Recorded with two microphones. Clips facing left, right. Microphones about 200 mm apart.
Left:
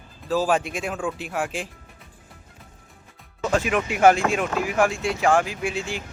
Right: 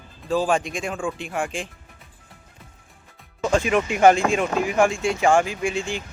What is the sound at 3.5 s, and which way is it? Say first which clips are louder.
Speech: right 2 dB; 5° left (ahead or behind).